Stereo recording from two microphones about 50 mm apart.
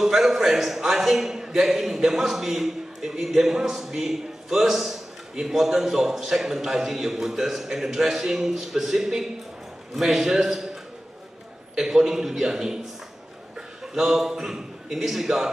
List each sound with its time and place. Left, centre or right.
0.0 s a man's voice: centre